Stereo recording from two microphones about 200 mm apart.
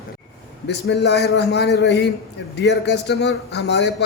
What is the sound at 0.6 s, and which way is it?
Speech, 55° left (ahead or behind).